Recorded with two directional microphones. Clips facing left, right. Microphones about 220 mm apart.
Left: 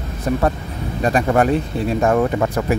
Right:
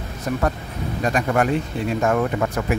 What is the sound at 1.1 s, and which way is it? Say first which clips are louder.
Speech: left 4 dB; 35° left (ahead or behind).